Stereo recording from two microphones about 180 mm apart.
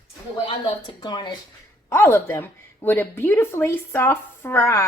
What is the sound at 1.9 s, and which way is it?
A woman's voice, 15° left (ahead or behind).